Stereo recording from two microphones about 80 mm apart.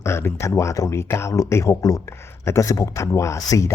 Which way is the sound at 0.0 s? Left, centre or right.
Left.